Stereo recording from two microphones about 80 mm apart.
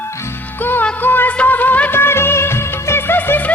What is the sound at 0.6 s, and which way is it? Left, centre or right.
Music, left.